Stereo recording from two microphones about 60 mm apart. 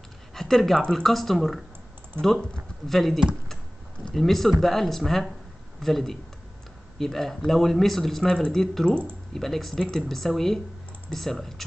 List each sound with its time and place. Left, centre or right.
0.3 s speech: centre
2.9 s a man's voice: centre
8.8 s speech: centre
9.3 s speech: centre